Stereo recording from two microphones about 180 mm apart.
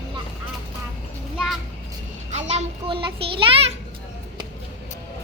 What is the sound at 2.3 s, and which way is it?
A child's voice, 40° right (ahead or behind).